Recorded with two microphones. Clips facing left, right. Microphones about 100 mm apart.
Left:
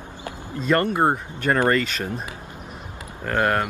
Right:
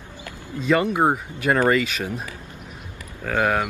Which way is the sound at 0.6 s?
Centre (ahead or behind).